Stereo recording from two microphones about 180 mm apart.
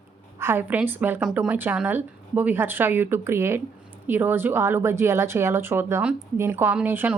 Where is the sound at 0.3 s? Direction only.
15° right (ahead or behind).